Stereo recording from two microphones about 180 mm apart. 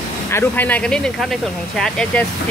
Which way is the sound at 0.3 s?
10° left (ahead or behind).